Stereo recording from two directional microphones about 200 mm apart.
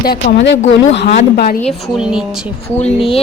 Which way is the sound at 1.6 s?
Centre (ahead or behind).